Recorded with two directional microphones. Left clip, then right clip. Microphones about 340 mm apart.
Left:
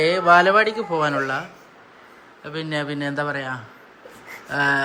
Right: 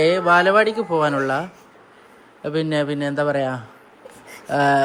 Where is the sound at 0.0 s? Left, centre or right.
Centre.